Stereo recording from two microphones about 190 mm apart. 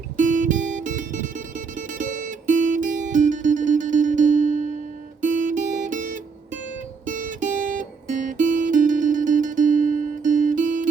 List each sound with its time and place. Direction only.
0.2 s music: 45° right (ahead or behind)